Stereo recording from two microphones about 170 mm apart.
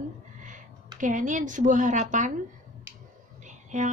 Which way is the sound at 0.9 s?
50° right (ahead or behind).